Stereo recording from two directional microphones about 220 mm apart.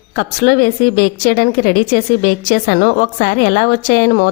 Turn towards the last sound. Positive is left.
turn(degrees=40)  # may be behind; listen again after turning